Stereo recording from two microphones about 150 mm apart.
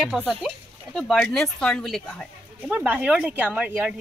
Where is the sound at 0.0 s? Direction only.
5° right (ahead or behind).